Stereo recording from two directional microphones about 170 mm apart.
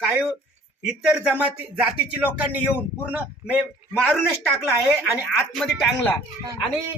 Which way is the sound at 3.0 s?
10° right (ahead or behind).